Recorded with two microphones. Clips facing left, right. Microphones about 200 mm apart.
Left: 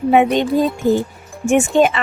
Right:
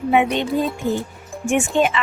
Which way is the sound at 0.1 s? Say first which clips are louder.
Left 4 dB; 40° left (ahead or behind).